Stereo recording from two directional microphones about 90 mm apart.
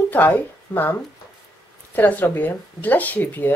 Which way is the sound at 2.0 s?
20° left (ahead or behind).